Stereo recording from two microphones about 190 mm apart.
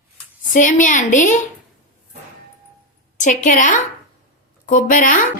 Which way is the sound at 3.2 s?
40° left (ahead or behind).